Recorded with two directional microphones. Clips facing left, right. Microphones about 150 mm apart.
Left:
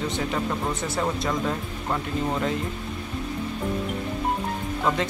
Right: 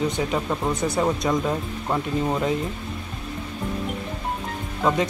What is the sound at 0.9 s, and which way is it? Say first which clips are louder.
Speech: right 3 dB; 15° right (ahead or behind).